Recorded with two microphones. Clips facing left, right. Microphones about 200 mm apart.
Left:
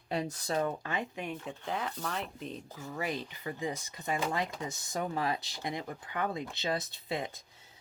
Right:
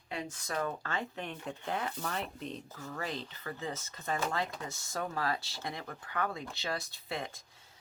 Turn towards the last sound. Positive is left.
turn(degrees=20)  # may be behind; listen again after turning